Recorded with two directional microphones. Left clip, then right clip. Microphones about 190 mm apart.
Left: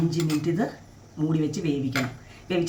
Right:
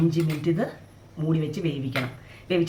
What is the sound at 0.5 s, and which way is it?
Speech, 5° right (ahead or behind).